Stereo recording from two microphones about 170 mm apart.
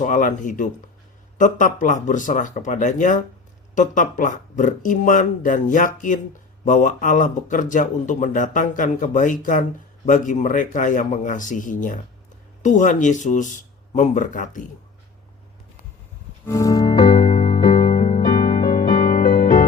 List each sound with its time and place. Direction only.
0.0 s speech: 50° left (ahead or behind)
16.5 s music: 20° left (ahead or behind)